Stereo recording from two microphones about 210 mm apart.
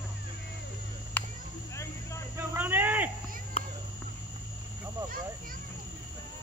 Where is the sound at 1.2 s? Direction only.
5° left (ahead or behind).